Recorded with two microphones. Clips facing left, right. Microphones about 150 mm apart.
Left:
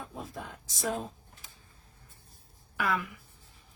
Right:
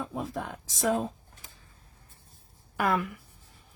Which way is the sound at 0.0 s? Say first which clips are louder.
Right 7 dB; 90° right.